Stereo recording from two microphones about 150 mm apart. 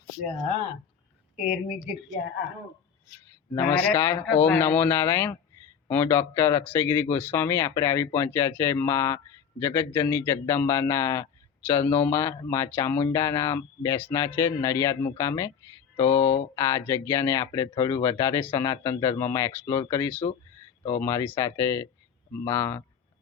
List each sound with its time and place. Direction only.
3.5 s speech: 15° left (ahead or behind)